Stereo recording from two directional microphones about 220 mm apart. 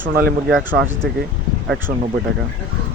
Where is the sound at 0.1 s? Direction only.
45° right (ahead or behind).